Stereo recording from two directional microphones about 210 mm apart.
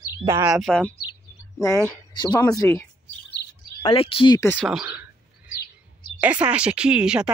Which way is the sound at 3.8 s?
25° left (ahead or behind).